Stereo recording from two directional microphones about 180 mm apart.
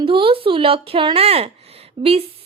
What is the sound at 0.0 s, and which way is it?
A woman's voice, 30° right (ahead or behind).